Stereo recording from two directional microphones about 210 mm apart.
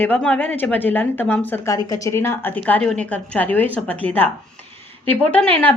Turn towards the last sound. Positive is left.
turn(degrees=10)  # may be behind; listen again after turning